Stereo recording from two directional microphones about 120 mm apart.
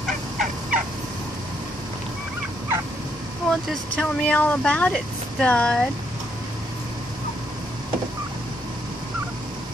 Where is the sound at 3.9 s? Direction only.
10° left (ahead or behind).